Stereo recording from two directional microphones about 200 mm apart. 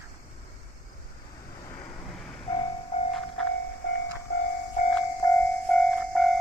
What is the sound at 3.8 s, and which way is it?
Train, 55° left (ahead or behind).